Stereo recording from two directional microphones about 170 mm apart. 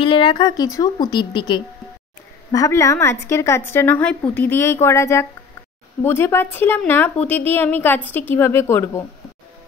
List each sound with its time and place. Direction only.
0.0 s a woman's voice: 30° left (ahead or behind)